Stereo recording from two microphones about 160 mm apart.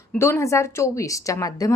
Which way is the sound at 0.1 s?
15° left (ahead or behind).